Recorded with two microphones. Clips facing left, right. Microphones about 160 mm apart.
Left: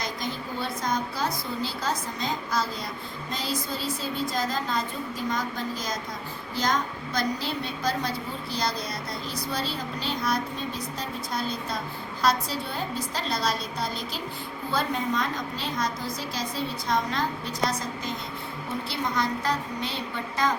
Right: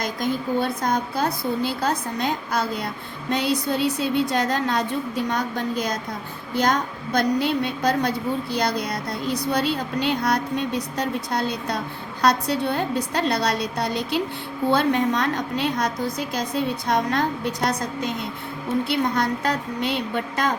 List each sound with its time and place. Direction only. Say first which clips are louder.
0.0 s a woman's voice: right 7 dB; 50° right (ahead or behind); by 13.9 s 70° right (ahead or behind)
14.7 s a woman's voice: right 7 dB; 80° right; by 20.5 s 65° right (ahead or behind)